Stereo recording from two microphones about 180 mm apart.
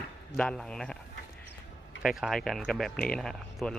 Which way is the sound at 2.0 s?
5° right (ahead or behind).